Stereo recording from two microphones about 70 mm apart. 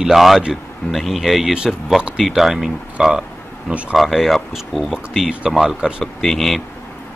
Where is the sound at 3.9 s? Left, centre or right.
Centre.